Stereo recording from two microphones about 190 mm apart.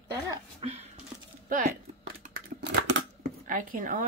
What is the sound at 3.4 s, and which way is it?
Speech, 45° right (ahead or behind).